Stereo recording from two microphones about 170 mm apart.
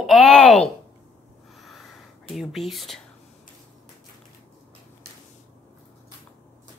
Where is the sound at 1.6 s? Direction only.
Centre (ahead or behind).